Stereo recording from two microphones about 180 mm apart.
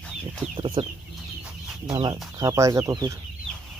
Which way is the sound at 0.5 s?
25° right (ahead or behind).